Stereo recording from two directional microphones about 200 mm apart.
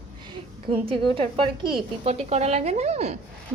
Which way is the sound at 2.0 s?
30° right (ahead or behind).